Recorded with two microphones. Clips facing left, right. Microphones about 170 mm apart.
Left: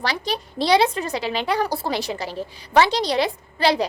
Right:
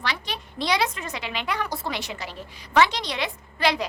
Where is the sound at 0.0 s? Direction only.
35° left (ahead or behind).